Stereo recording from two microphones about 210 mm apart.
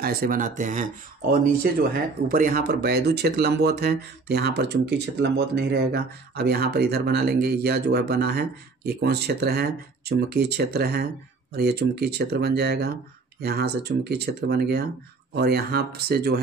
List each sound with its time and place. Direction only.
0.0 s speech: 45° right (ahead or behind)